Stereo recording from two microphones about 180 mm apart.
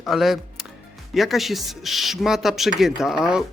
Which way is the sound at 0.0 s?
Centre (ahead or behind).